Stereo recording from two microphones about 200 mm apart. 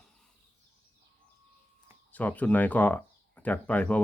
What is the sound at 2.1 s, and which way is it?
Speech, 10° left (ahead or behind).